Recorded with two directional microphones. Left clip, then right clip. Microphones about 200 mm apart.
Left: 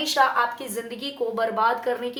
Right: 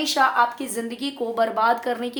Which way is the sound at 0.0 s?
30° right (ahead or behind).